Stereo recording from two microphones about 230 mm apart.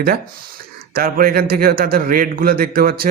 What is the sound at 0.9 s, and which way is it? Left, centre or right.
Speech, right.